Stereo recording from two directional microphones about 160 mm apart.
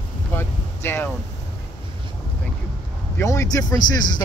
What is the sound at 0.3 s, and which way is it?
Vehicle, 15° left (ahead or behind).